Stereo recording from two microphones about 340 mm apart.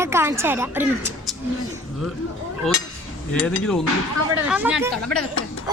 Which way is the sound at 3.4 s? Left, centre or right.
Centre.